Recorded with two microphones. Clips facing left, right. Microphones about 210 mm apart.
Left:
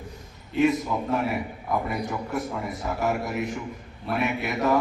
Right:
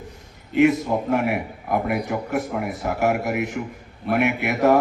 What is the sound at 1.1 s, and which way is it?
A man's voice, 70° right (ahead or behind).